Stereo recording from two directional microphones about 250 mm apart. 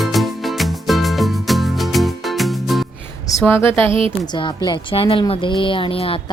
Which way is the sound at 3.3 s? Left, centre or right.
Centre.